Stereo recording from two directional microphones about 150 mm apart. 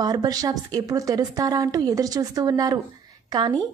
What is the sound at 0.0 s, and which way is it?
A woman's voice, 25° right (ahead or behind).